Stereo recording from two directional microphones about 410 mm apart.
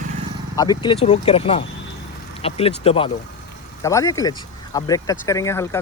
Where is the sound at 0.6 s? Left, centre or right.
Centre.